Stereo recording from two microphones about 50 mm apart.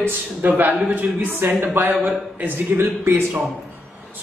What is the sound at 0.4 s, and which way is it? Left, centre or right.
Speech, right.